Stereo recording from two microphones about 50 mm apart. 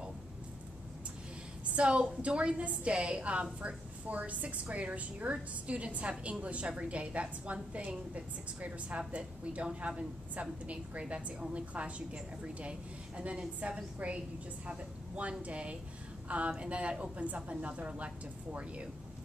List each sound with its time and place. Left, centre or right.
1.8 s a woman's voice: right